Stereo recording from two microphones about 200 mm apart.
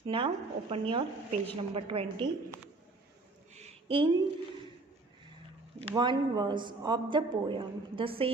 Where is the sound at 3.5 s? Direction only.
30° right (ahead or behind).